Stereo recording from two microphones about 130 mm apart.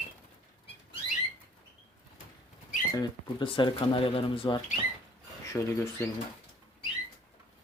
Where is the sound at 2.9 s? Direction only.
35° left (ahead or behind).